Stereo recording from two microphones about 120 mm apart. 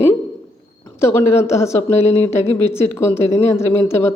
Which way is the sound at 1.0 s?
20° left (ahead or behind).